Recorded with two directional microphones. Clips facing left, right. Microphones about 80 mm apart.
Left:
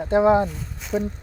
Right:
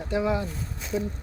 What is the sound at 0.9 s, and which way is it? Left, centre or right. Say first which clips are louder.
Speech: left 4 dB; left.